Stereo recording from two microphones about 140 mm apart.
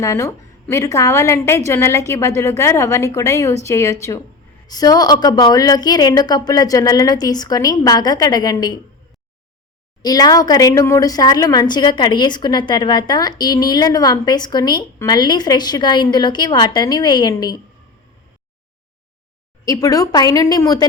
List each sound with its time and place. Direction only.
0.0 s speech: 20° left (ahead or behind)
10.0 s a woman's voice: 25° left (ahead or behind)
19.6 s speech: 25° left (ahead or behind)